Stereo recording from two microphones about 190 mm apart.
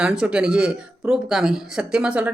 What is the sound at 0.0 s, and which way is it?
Speech, 5° right (ahead or behind).